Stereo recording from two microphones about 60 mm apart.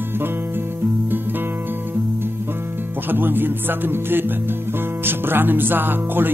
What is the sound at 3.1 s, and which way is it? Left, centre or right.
Music, right.